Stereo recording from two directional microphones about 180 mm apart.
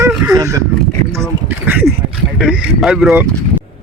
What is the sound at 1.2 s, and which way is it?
Speech, 10° right (ahead or behind).